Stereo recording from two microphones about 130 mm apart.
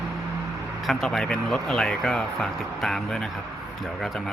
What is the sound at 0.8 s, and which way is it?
Speech, centre (ahead or behind).